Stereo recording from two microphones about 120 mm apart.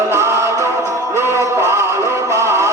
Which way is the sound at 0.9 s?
25° right (ahead or behind).